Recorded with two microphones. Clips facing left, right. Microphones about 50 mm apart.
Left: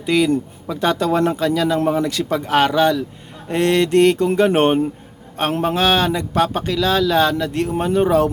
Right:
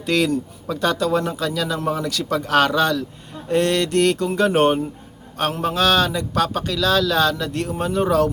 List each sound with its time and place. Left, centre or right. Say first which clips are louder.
0.0 s a man's voice: left 3 dB; centre
0.3 s speech: left 3 dB; left